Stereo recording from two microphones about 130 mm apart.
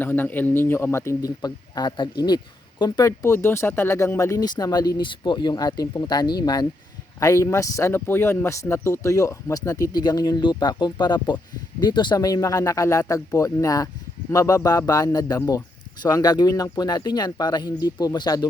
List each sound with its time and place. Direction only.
0.0 s speech: 15° left (ahead or behind); by 3.1 s 35° left (ahead or behind)
3.1 s speech: 20° left (ahead or behind)